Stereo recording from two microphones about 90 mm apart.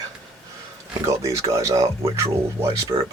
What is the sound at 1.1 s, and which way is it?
Speech, 35° right (ahead or behind).